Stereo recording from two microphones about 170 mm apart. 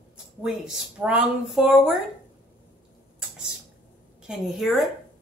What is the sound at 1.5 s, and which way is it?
Speech, centre (ahead or behind).